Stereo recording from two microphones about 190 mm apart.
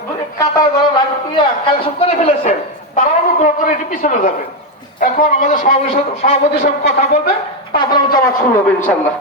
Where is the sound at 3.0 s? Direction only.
40° left (ahead or behind).